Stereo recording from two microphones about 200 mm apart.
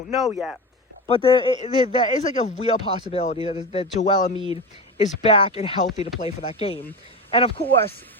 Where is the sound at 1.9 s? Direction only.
35° left (ahead or behind).